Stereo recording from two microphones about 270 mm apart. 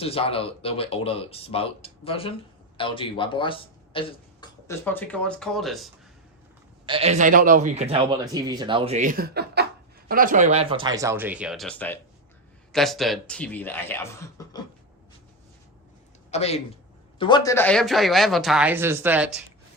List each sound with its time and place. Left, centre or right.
0.0 s speech: left; by 5.9 s centre
6.8 s a man's voice: right; by 14.6 s centre
16.3 s a man's voice: left; by 19.4 s centre